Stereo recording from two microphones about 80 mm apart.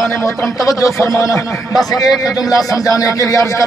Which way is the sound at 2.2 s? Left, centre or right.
Left.